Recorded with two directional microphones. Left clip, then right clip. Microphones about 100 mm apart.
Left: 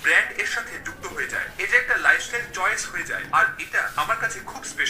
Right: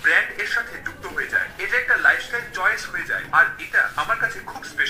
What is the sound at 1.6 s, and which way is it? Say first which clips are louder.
Telephone: left 3 dB; 15° left (ahead or behind).